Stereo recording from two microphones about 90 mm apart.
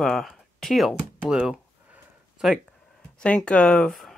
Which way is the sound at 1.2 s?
10° right (ahead or behind).